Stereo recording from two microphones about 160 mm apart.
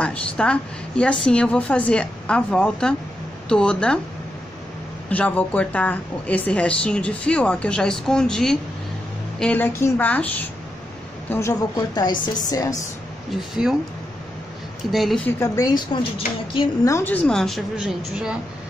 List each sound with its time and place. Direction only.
0.0 s a woman's voice: 5° left (ahead or behind)
5.1 s a woman's voice: 10° left (ahead or behind)
13.3 s a woman's voice: centre (ahead or behind)
14.9 s a woman's voice: centre (ahead or behind)
15.2 s a woman's voice: 15° left (ahead or behind)
16.8 s a woman's voice: 15° left (ahead or behind); by 18.3 s 5° right (ahead or behind)